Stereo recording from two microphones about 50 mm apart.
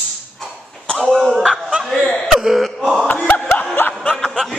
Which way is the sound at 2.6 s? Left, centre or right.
Centre.